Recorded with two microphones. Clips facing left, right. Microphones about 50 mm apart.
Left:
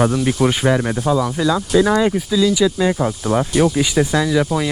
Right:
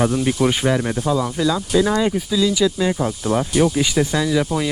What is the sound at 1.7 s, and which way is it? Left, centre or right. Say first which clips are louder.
Speech: left 3 dB; left.